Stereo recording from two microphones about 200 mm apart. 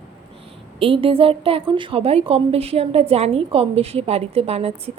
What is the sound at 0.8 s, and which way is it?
A woman's voice, 25° right (ahead or behind).